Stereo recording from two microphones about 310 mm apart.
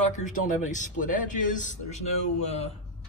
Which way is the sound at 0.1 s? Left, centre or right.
Left.